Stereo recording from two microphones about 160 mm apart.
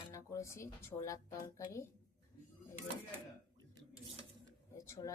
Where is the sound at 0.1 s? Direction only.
20° left (ahead or behind).